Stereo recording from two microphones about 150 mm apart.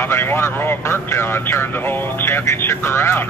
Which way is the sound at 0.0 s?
15° left (ahead or behind).